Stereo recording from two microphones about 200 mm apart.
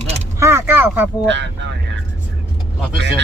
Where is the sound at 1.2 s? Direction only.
65° right (ahead or behind).